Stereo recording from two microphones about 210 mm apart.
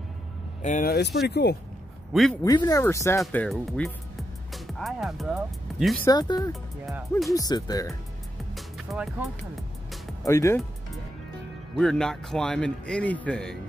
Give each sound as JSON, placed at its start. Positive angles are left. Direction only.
{"t": 0.6, "sound": "speech", "side_deg": 35}
{"t": 2.4, "sound": "speech", "side_deg": 20}
{"t": 3.2, "sound": "speech", "side_deg": 5}
{"t": 3.7, "sound": "music", "side_deg": 5}
{"t": 4.7, "sound": "speech", "side_deg": 0}
{"t": 6.0, "sound": "speech", "side_deg": 20}
{"t": 8.5, "sound": "music", "side_deg": 0}
{"t": 10.2, "sound": "speech", "side_deg": 15}
{"t": 11.7, "sound": "speech", "side_deg": 0}